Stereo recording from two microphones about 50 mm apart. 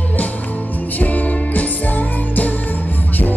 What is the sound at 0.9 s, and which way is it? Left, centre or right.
Music, left.